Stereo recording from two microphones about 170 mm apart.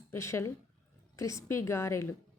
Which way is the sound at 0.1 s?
15° left (ahead or behind).